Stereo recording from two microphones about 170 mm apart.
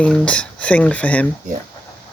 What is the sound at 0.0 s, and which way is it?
Speech, 5° left (ahead or behind).